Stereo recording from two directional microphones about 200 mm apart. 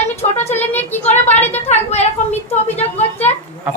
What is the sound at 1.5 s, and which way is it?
Speech, 35° left (ahead or behind).